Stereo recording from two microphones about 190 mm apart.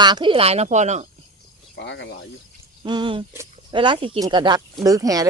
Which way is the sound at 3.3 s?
15° right (ahead or behind).